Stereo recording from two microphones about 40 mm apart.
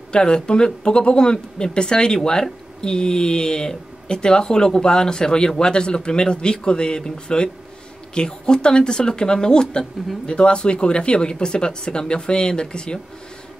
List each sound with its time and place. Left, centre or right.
0.1 s speech: left